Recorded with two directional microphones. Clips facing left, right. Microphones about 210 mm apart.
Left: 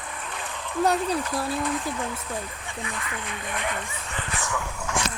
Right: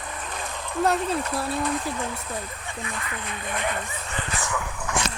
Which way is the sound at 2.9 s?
35° right (ahead or behind).